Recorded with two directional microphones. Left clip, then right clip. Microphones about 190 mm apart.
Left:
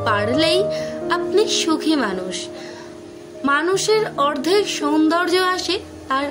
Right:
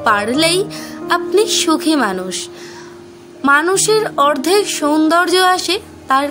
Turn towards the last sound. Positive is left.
turn(degrees=-40)  # may be behind; listen again after turning